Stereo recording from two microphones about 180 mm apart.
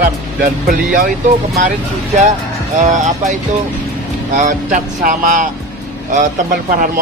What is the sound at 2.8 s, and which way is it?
Speech, 40° right (ahead or behind).